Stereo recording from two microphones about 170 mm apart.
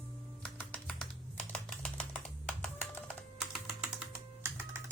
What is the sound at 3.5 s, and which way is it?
Typing, centre (ahead or behind).